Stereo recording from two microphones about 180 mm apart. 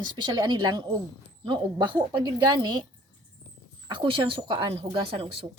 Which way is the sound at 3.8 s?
30° right (ahead or behind).